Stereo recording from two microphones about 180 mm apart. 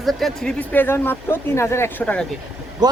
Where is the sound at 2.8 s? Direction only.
25° right (ahead or behind).